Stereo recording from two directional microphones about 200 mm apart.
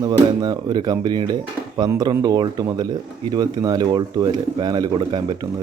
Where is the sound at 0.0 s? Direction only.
20° right (ahead or behind).